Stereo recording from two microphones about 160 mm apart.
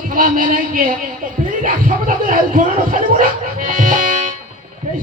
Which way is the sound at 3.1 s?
55° right (ahead or behind).